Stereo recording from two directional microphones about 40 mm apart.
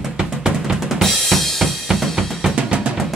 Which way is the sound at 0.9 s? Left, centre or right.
Centre.